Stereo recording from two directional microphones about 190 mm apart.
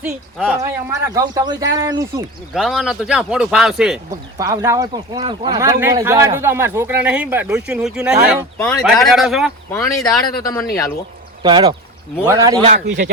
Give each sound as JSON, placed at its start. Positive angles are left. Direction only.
{"t": 0.0, "sound": "speech", "side_deg": -5}
{"t": 0.6, "sound": "speech", "side_deg": -15}
{"t": 2.6, "sound": "speech", "side_deg": 0}
{"t": 4.4, "sound": "speech", "side_deg": -15}
{"t": 9.7, "sound": "speech", "side_deg": 15}
{"t": 11.4, "sound": "speech", "side_deg": -25}